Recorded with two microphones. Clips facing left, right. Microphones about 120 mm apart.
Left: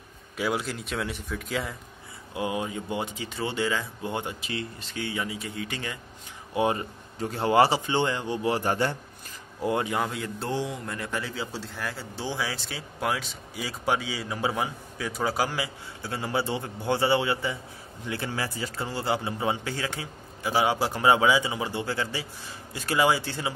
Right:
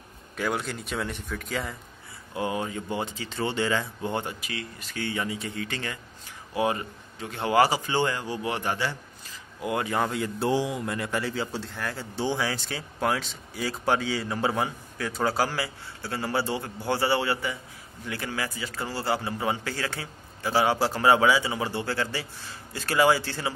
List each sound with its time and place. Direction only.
0.4 s a man's voice: centre (ahead or behind)
2.3 s speech: 15° left (ahead or behind)
4.4 s speech: 30° left (ahead or behind)
4.9 s speech: 10° left (ahead or behind)
6.5 s speech: 25° left (ahead or behind)
10.0 s a man's voice: centre (ahead or behind)
10.4 s speech: 10° right (ahead or behind); by 23.5 s 15° left (ahead or behind)